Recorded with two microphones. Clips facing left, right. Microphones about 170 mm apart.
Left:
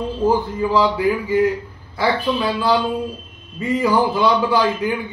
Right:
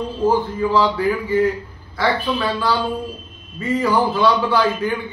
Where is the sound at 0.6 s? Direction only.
15° left (ahead or behind).